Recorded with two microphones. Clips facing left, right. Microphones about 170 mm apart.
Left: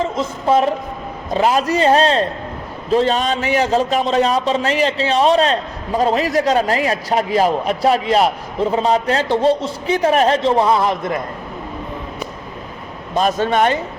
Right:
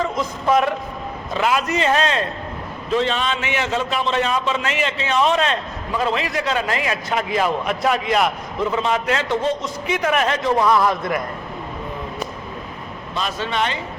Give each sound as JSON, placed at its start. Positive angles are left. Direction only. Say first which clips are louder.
{"t": 0.0, "sound": "a man's voice", "louder": "left 2 dB", "side_deg": 30}
{"t": 13.1, "sound": "a man's voice", "louder": "left 8 dB", "side_deg": 50}